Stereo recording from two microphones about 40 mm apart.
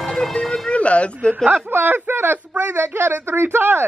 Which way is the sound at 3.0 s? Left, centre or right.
Right.